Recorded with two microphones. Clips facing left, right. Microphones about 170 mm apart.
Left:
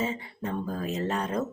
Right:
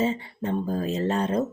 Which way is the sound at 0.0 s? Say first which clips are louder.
Right 5 dB; 30° right (ahead or behind).